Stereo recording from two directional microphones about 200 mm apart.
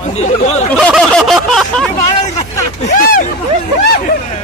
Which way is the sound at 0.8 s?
5° left (ahead or behind).